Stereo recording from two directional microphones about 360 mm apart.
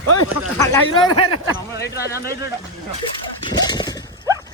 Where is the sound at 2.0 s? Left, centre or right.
Left.